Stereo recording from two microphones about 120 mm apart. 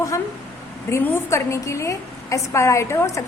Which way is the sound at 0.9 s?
20° left (ahead or behind).